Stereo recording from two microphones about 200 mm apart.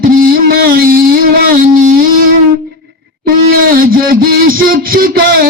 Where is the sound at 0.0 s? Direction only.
45° right (ahead or behind).